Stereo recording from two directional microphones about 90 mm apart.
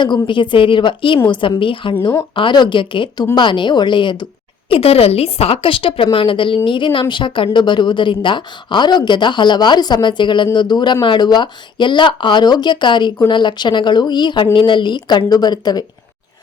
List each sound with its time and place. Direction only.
0.0 s a woman's voice: 65° left (ahead or behind)
4.7 s a woman's voice: 90° left; by 15.8 s 50° left (ahead or behind)